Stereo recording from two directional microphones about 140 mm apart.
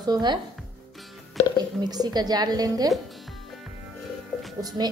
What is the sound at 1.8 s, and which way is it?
A woman's voice, 30° right (ahead or behind).